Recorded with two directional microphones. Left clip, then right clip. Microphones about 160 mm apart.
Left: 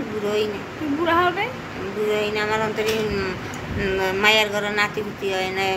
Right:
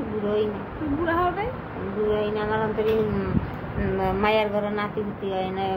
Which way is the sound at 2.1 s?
20° right (ahead or behind).